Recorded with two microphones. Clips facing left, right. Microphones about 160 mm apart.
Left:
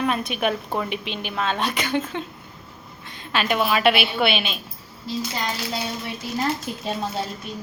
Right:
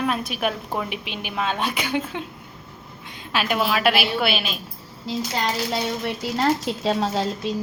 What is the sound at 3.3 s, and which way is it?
A woman's voice, 5° right (ahead or behind).